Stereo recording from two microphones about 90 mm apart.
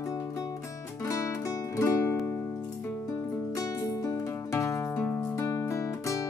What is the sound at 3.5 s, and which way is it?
Music, 40° left (ahead or behind).